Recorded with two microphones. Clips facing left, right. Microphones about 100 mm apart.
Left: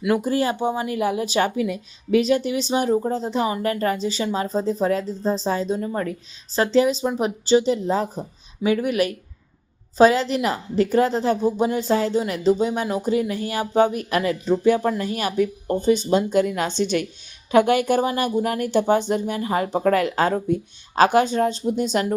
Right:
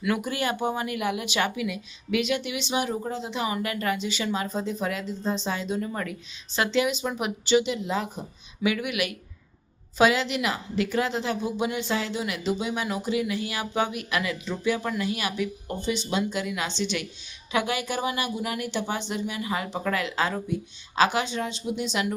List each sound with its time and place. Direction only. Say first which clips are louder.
0.0 s a woman's voice: left 6 dB; 30° left (ahead or behind)